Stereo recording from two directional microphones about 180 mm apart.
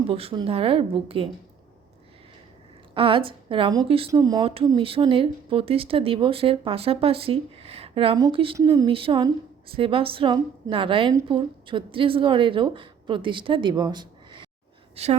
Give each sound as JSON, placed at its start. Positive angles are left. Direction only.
{"t": 0.0, "sound": "speech", "side_deg": -35}
{"t": 2.9, "sound": "a woman's voice", "side_deg": -30}
{"t": 15.0, "sound": "speech", "side_deg": -35}